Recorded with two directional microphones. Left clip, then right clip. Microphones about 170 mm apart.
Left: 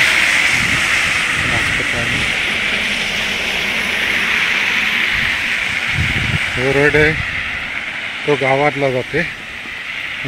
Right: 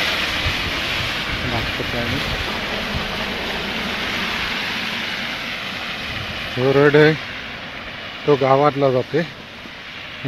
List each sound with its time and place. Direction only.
0.0 s vehicle: 65° right (ahead or behind)
4.1 s vehicle: 75° right (ahead or behind)
6.7 s speech: 5° right (ahead or behind)
8.3 s speech: 15° right (ahead or behind)